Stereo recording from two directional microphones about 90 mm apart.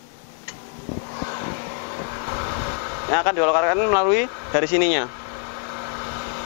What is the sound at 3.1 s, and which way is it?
Speech, 20° left (ahead or behind).